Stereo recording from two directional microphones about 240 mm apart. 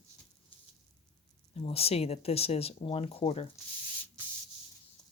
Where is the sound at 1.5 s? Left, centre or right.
Left.